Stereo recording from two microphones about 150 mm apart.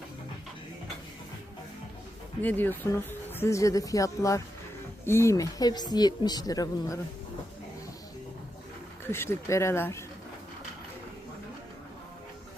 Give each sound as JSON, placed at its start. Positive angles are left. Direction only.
{"t": 2.4, "sound": "speech", "side_deg": 10}
{"t": 9.0, "sound": "speech", "side_deg": 15}